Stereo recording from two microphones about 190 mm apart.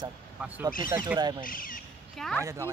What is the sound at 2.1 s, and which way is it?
Speech, centre (ahead or behind).